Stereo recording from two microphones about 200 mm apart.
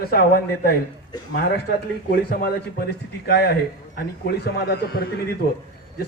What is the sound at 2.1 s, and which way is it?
A man's voice, 50° left (ahead or behind).